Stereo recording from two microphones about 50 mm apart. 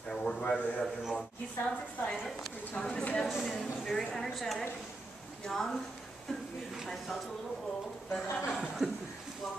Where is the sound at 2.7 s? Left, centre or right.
Centre.